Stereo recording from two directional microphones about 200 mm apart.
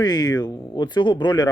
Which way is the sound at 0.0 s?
20° left (ahead or behind).